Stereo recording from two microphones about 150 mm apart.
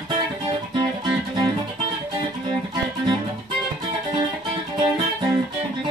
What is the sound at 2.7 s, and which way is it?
Music, 35° right (ahead or behind).